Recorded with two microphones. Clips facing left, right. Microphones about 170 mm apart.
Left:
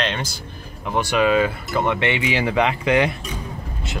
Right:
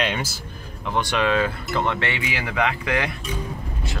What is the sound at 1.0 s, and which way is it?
Speech, 10° left (ahead or behind).